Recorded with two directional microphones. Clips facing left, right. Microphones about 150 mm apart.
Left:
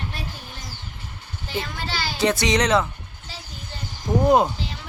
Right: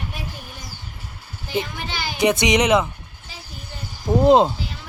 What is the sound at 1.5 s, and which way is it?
Speech, 15° right (ahead or behind).